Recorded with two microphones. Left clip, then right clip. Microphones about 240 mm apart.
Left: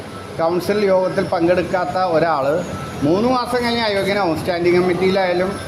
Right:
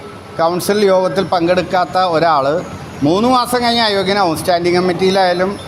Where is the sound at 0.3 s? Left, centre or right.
Right.